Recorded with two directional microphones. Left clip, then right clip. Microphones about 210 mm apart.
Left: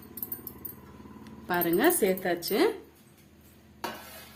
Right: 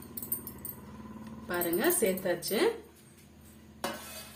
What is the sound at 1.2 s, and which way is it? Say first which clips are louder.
A woman's voice: left 5 dB; 50° left (ahead or behind).